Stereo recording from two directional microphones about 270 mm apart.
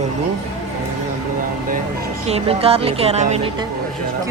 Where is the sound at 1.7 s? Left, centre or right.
Right.